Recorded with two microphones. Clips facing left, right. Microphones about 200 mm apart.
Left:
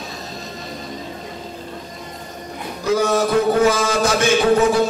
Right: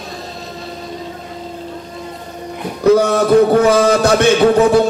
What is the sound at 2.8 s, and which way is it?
A man's voice, 60° right (ahead or behind).